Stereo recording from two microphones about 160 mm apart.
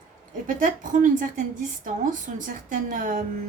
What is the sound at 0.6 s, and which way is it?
A woman's voice, 55° right (ahead or behind).